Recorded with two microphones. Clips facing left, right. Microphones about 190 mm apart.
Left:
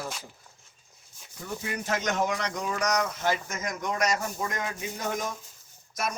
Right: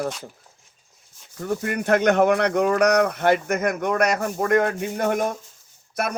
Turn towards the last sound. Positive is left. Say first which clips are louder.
# right 6 dB
turn(degrees=-60)  # may be behind; listen again after turning